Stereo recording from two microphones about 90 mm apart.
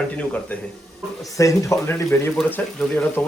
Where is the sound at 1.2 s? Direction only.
40° left (ahead or behind).